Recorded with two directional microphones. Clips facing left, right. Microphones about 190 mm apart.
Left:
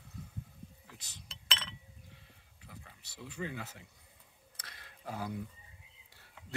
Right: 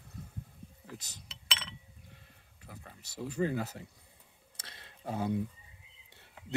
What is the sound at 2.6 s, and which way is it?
Speech, 45° right (ahead or behind).